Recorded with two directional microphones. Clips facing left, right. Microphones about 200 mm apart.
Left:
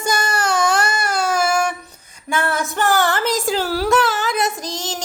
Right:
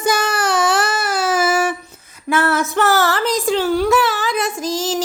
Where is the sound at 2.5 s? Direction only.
Centre (ahead or behind).